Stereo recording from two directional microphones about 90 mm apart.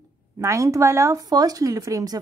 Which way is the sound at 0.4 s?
35° right (ahead or behind).